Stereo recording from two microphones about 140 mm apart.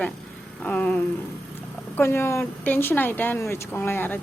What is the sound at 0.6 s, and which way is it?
Speech, 10° left (ahead or behind).